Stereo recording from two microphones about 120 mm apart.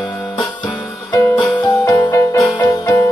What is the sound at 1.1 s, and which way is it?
Music, 35° left (ahead or behind).